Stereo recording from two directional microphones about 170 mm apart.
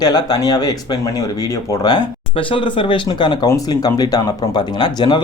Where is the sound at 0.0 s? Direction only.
25° left (ahead or behind).